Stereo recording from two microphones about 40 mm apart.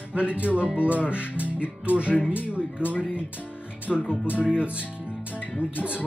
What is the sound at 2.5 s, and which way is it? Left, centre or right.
Speech, right.